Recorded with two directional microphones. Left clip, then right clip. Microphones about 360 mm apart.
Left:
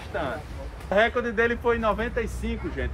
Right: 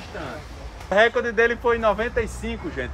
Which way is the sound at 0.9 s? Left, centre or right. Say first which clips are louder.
Right 4 dB; right.